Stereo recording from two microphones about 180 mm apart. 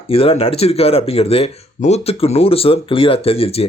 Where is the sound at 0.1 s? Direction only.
35° left (ahead or behind).